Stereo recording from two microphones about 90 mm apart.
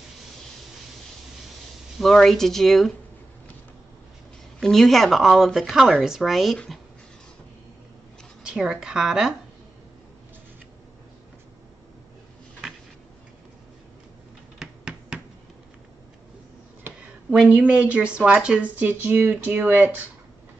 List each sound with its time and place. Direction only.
2.0 s a woman's voice: centre (ahead or behind)
4.6 s a woman's voice: 5° left (ahead or behind)
8.5 s a woman's voice: 5° right (ahead or behind)
14.6 s finger snapping: 10° right (ahead or behind)
17.3 s speech: 15° right (ahead or behind)